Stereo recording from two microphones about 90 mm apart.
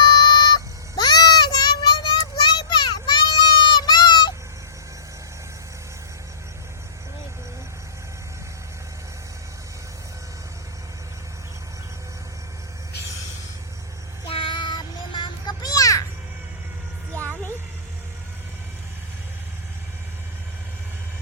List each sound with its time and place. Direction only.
0.0 s child singing: 55° left (ahead or behind)
14.3 s child singing: 75° left (ahead or behind); by 15.5 s 60° left (ahead or behind)
15.6 s children playing: 40° left (ahead or behind)
17.1 s a sound: 30° right (ahead or behind)